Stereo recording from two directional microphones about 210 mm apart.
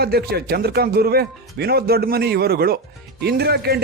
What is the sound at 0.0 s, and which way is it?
A man's voice, 50° right (ahead or behind).